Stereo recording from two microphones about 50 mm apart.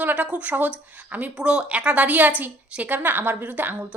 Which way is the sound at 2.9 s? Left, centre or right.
Right.